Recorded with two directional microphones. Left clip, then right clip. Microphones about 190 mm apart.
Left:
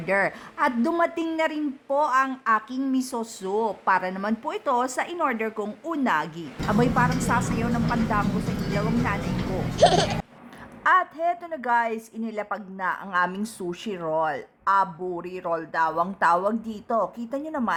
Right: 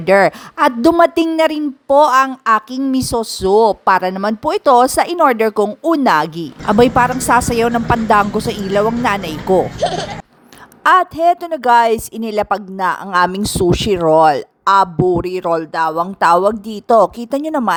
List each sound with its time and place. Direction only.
0.0 s a woman's voice: 45° right (ahead or behind)
9.8 s speech: centre (ahead or behind)
10.8 s a woman's voice: 45° right (ahead or behind)